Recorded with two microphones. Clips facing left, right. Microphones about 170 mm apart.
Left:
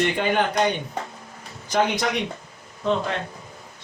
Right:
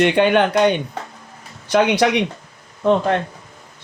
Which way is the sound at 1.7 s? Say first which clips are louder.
Right 7 dB; 80° right.